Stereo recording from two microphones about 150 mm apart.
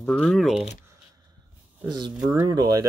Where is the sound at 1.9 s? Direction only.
25° right (ahead or behind).